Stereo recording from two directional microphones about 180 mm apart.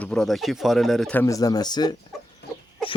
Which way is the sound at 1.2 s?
20° left (ahead or behind).